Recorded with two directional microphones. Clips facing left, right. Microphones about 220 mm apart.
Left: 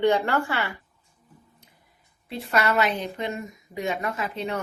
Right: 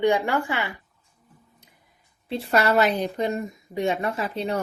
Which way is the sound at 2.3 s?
35° right (ahead or behind).